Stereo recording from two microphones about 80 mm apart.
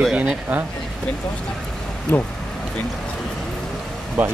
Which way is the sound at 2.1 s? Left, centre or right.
Left.